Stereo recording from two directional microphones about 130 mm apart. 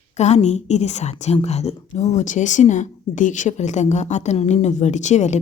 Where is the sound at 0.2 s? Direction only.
60° left (ahead or behind).